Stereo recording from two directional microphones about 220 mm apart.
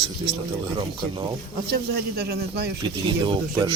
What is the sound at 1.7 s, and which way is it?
A man's voice, 45° right (ahead or behind).